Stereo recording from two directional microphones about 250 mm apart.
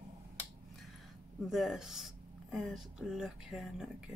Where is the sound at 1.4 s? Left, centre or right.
Centre.